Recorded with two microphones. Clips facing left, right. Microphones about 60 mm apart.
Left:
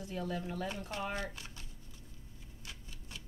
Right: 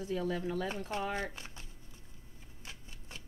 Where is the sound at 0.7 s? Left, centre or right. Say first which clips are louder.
Right 3 dB; right.